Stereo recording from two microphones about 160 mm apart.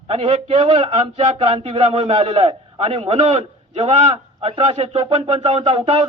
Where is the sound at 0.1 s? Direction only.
45° right (ahead or behind).